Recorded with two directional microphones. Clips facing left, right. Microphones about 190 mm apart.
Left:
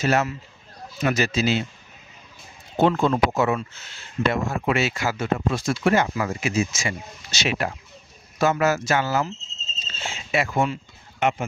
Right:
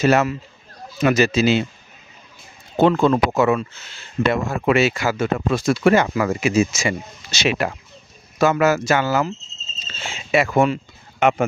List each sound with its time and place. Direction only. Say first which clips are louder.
0.0 s speech: right 5 dB; 85° right
2.8 s speech: right 4 dB; 90° right
9.9 s speech: right 5 dB; 80° right